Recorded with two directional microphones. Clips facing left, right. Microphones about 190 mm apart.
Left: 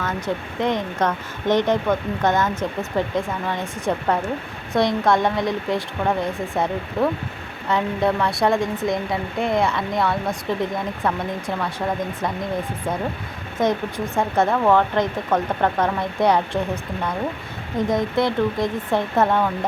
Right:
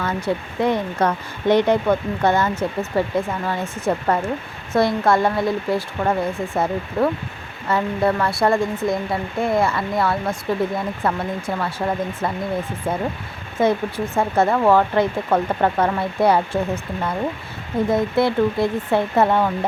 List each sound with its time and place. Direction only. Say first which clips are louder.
0.0 s speech: right 2 dB; 10° right (ahead or behind)
13.6 s speech: right 2 dB; 10° right (ahead or behind)
17.8 s speech: right 2 dB; 5° right (ahead or behind)